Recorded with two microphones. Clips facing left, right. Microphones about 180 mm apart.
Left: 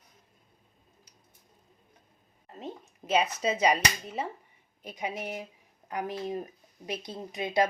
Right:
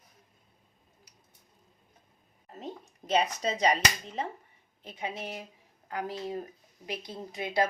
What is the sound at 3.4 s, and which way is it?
Speech, 5° left (ahead or behind).